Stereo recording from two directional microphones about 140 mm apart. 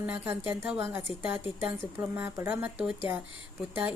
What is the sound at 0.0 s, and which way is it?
A woman's voice, 15° right (ahead or behind).